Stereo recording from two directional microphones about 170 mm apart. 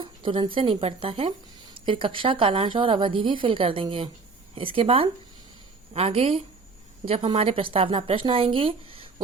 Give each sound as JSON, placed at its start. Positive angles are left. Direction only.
{"t": 0.0, "sound": "a woman's voice", "side_deg": -30}